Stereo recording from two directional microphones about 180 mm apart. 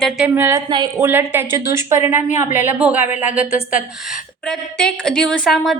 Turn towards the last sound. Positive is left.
turn(degrees=0)  # may be behind; listen again after turning